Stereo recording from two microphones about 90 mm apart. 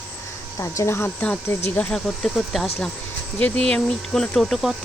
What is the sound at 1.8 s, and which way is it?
Cricket, 5° left (ahead or behind).